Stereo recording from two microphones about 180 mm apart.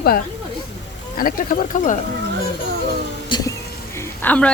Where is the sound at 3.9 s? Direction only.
10° left (ahead or behind).